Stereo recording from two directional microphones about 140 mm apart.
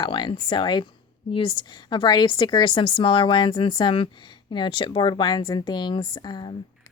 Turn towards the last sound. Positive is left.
turn(degrees=30)  # may be behind; listen again after turning